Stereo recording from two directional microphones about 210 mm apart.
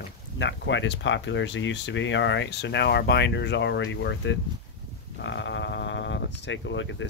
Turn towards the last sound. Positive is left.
turn(degrees=60)  # may be behind; listen again after turning